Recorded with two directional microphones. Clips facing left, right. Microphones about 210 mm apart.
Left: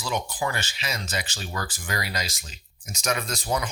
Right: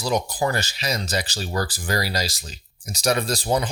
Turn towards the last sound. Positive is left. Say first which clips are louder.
# right 5 dB
turn(degrees=-30)  # may be behind; listen again after turning